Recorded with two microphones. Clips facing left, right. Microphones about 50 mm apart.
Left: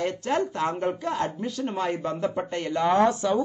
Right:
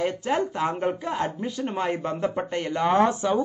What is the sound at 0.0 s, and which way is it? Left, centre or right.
A man's voice, centre.